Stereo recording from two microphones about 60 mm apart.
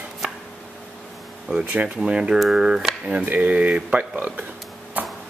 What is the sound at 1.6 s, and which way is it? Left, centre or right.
Speech, right.